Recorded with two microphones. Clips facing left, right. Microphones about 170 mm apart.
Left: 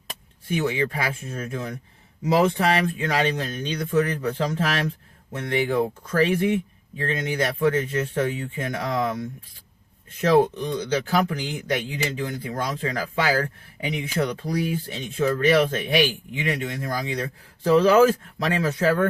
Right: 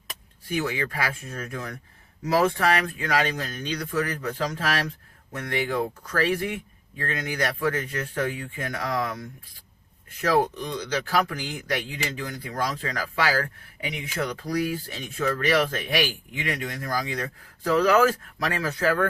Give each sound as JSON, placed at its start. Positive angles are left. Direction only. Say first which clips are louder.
{"t": 0.5, "sound": "speech", "louder": "left 3 dB", "side_deg": 25}
{"t": 10.2, "sound": "speech", "louder": "left 4 dB", "side_deg": 25}